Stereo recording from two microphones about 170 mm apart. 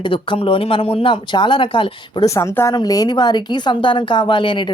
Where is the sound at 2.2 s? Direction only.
15° left (ahead or behind).